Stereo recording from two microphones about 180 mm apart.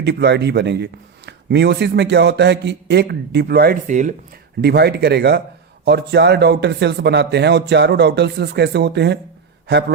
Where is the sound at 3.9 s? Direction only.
45° right (ahead or behind).